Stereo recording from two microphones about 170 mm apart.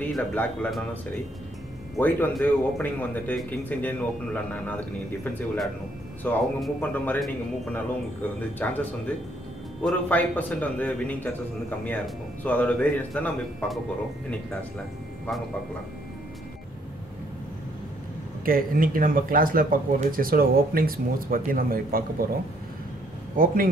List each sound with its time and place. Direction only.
0.0 s a man's voice: 10° left (ahead or behind)
2.0 s a man's voice: 10° left (ahead or behind)
9.8 s a man's voice: 10° left (ahead or behind)
12.4 s a man's voice: 5° left (ahead or behind)
18.4 s speech: 55° right (ahead or behind)
23.3 s speech: 55° right (ahead or behind)